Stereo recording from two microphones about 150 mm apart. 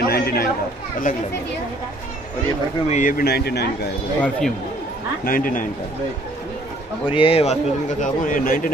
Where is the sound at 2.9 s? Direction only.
60° left (ahead or behind); by 3.9 s 90° left.